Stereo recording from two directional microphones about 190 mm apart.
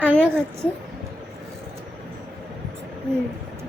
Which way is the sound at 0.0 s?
5° left (ahead or behind).